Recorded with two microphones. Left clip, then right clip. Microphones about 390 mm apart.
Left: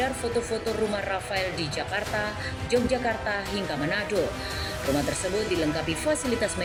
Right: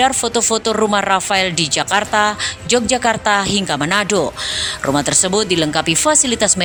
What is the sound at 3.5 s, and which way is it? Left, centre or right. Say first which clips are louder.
Speech: right 11 dB; right.